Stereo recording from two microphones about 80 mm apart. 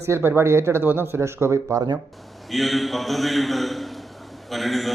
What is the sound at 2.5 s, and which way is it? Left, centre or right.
A man's voice, centre.